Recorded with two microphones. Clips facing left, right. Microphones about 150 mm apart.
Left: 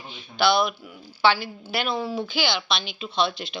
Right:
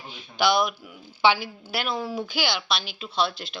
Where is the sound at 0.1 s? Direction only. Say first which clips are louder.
Left 1 dB; 15° right (ahead or behind).